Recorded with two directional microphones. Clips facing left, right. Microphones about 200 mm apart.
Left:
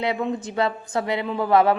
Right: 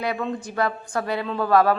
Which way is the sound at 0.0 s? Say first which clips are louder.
Left 2 dB; 20° left (ahead or behind).